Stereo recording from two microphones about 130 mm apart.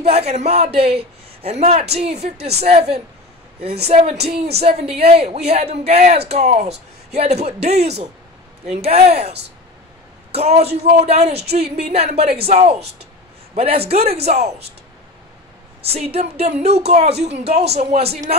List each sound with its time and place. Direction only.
0.0 s a woman's voice: 55° right (ahead or behind)
10.3 s a woman's voice: 55° right (ahead or behind)
15.8 s speech: 50° right (ahead or behind)